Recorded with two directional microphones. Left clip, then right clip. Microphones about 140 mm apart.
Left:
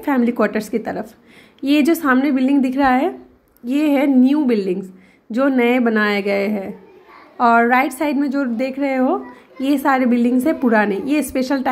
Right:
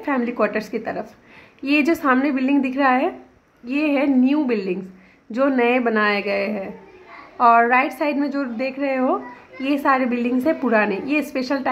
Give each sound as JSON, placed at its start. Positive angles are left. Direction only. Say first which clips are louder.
{"t": 0.0, "sound": "a woman's voice", "louder": "left 3 dB", "side_deg": 30}